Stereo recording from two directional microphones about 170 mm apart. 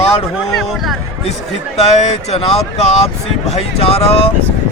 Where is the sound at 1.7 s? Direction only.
40° left (ahead or behind).